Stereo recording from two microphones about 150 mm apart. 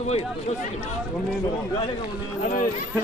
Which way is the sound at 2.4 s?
60° left (ahead or behind).